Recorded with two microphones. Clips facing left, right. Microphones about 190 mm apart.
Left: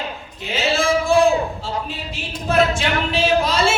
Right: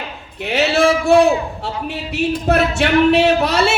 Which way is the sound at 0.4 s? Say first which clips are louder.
Right 5 dB; 70° right (ahead or behind).